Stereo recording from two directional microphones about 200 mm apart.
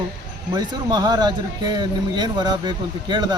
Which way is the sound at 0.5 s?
20° right (ahead or behind).